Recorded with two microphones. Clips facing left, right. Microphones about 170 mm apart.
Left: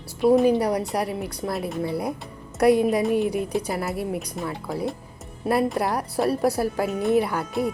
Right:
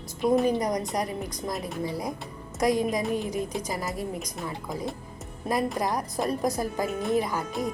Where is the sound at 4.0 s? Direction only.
Centre (ahead or behind).